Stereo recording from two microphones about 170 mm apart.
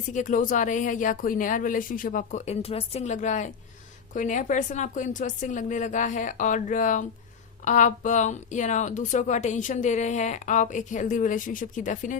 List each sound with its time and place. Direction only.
0.1 s speech: 50° left (ahead or behind)